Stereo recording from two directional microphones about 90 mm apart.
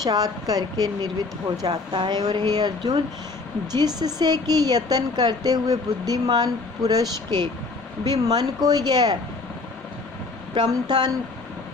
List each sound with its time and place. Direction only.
0.0 s a woman's voice: 45° right (ahead or behind)
10.5 s a woman's voice: 55° right (ahead or behind)